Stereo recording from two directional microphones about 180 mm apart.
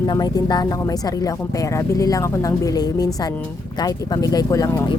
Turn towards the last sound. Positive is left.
turn(degrees=20)  # may be behind; listen again after turning